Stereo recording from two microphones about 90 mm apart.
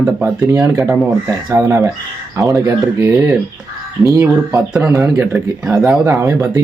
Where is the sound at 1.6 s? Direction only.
30° right (ahead or behind).